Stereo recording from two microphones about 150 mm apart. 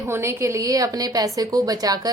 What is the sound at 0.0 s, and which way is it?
A woman's voice, 20° right (ahead or behind).